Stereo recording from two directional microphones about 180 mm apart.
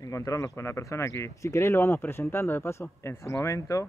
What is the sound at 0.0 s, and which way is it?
A man's voice, 20° left (ahead or behind).